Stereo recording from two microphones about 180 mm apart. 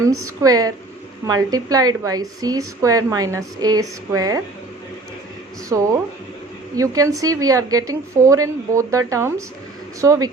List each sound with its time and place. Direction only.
0.0 s a woman's voice: 20° right (ahead or behind)
5.6 s a woman's voice: 15° right (ahead or behind)